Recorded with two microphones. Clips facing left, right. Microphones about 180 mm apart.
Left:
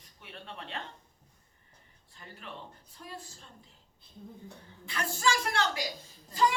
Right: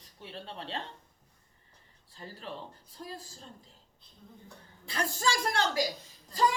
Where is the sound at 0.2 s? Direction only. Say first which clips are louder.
Right 3 dB; 30° right (ahead or behind).